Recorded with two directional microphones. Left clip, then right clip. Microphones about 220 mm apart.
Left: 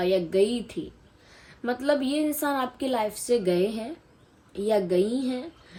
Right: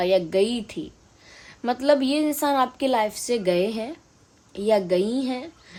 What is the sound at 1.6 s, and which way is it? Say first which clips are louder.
A woman's voice: right 5 dB; 30° right (ahead or behind).